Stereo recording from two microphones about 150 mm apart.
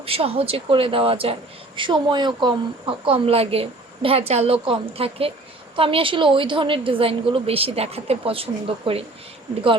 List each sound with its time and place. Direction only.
0.0 s speech: 40° right (ahead or behind)